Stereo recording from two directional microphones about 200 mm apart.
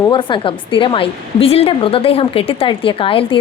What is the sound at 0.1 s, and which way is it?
Speech, 25° left (ahead or behind).